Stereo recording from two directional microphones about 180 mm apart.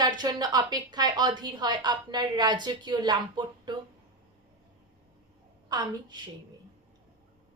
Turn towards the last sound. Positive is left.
turn(degrees=-25)  # may be behind; listen again after turning